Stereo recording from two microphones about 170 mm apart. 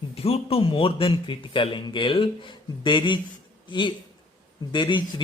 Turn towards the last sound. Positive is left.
turn(degrees=25)  # may be behind; listen again after turning